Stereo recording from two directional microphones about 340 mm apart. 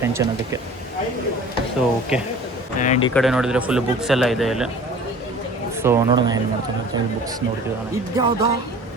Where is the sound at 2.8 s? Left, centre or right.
Centre.